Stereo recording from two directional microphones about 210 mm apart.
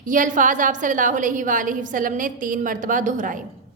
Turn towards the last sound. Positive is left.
turn(degrees=-40)  # may be behind; listen again after turning